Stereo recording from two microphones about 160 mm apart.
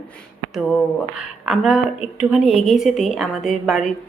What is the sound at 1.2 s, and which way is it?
A woman's voice, 5° right (ahead or behind).